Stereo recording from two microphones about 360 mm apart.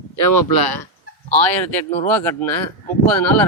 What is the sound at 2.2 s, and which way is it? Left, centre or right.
Speech, centre.